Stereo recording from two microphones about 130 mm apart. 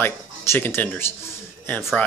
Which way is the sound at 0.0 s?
15° left (ahead or behind).